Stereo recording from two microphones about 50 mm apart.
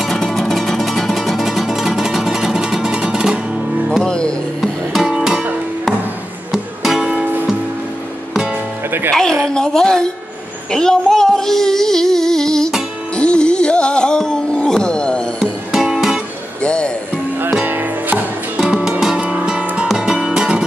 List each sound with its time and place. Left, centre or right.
0.0 s music: centre
4.0 s music: centre
4.6 s music: centre
6.5 s music: centre
9.1 s a sound: centre
9.5 s speech: centre
10.7 s a sound: centre
13.1 s music: left
15.7 s music: centre
16.6 s music: left
17.6 s music: right
18.6 s music: centre